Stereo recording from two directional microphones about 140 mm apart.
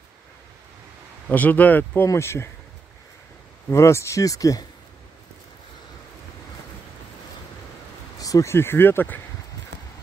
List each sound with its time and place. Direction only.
1.3 s speech: 10° left (ahead or behind)
3.7 s speech: 20° left (ahead or behind)
8.2 s speech: 25° left (ahead or behind)